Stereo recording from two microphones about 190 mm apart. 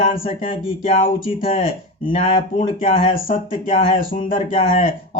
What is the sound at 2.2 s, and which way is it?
Speech, 40° left (ahead or behind).